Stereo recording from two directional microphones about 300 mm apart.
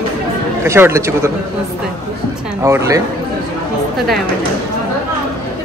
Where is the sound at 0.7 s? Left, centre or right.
Centre.